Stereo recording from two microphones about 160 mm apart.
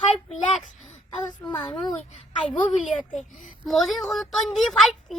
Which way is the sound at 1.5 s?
25° left (ahead or behind).